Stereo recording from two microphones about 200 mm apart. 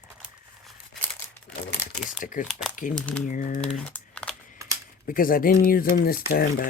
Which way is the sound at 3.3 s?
40° left (ahead or behind).